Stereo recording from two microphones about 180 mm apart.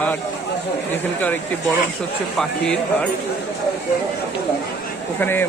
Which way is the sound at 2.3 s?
5° left (ahead or behind).